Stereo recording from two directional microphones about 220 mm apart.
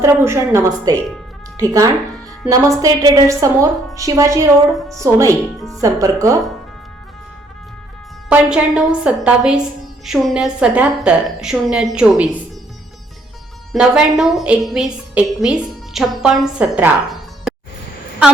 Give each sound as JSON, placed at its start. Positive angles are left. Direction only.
{"t": 0.0, "sound": "a woman's voice", "side_deg": -15}
{"t": 5.5, "sound": "a woman's voice", "side_deg": 0}
{"t": 5.8, "sound": "a woman's voice", "side_deg": -15}
{"t": 8.3, "sound": "a woman's voice", "side_deg": -5}
{"t": 13.7, "sound": "a woman's voice", "side_deg": 0}